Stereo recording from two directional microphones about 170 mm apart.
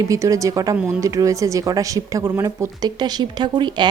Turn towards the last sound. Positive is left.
turn(degrees=-25)  # may be behind; listen again after turning